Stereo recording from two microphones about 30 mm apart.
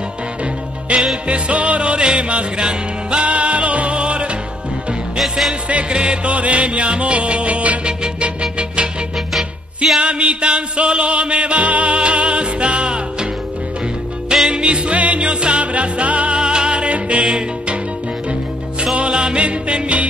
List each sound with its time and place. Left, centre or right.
0.9 s music: right
3.3 s music: right
5.9 s music: right
6.3 s music: right
8.2 s music: right
9.9 s music: right
14.5 s music: right
16.3 s music: right
19.0 s music: right